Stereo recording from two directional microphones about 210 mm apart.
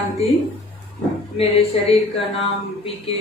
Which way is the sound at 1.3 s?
30° left (ahead or behind).